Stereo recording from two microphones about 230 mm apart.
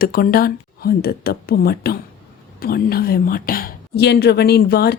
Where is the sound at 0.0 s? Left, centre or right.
Left.